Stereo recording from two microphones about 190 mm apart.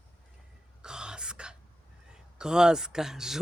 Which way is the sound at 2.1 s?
5° right (ahead or behind).